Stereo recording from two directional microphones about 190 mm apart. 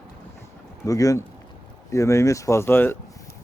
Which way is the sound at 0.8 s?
15° left (ahead or behind).